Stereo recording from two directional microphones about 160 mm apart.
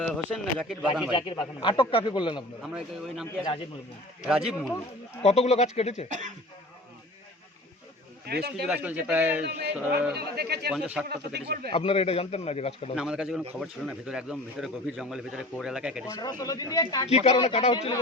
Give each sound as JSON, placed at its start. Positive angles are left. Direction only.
{"t": 0.0, "sound": "a man's voice", "side_deg": 5}
{"t": 1.1, "sound": "a man's voice", "side_deg": 30}
{"t": 2.6, "sound": "a man's voice", "side_deg": -5}
{"t": 5.2, "sound": "speech", "side_deg": 40}
{"t": 6.1, "sound": "speech", "side_deg": -50}
{"t": 8.3, "sound": "speech", "side_deg": -80}
{"t": 8.6, "sound": "speech", "side_deg": -10}
{"t": 10.1, "sound": "speech", "side_deg": -85}
{"t": 10.7, "sound": "a man's voice", "side_deg": -5}
{"t": 11.1, "sound": "speech", "side_deg": -90}
{"t": 11.7, "sound": "a man's voice", "side_deg": 35}
{"t": 13.0, "sound": "a man's voice", "side_deg": -5}
{"t": 16.0, "sound": "speech", "side_deg": 20}
{"t": 17.1, "sound": "a man's voice", "side_deg": 40}